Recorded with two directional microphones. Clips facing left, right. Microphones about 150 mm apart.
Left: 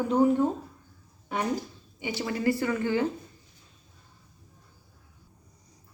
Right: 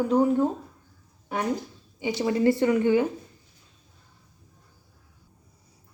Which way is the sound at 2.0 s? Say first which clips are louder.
Right 5 dB; 20° right (ahead or behind).